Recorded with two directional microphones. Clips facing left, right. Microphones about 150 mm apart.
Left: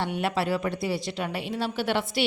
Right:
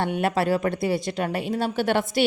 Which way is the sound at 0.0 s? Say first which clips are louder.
Right 4 dB; 50° right (ahead or behind).